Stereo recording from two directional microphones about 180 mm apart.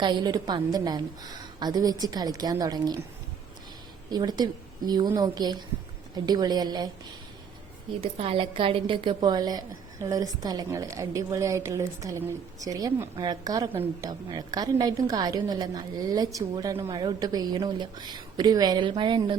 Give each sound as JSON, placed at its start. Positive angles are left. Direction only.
{"t": 0.0, "sound": "a woman's voice", "side_deg": -25}
{"t": 4.1, "sound": "a woman's voice", "side_deg": -25}
{"t": 8.0, "sound": "a woman's voice", "side_deg": -30}